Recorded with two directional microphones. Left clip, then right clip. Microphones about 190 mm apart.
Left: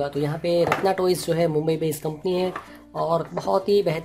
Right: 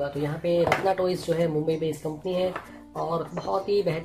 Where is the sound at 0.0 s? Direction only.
45° left (ahead or behind).